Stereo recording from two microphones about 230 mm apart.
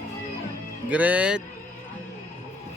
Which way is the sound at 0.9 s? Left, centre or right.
Centre.